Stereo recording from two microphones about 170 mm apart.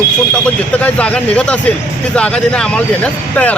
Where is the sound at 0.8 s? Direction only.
5° left (ahead or behind).